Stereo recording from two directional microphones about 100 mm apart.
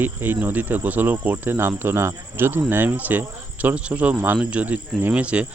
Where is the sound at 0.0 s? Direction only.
20° right (ahead or behind).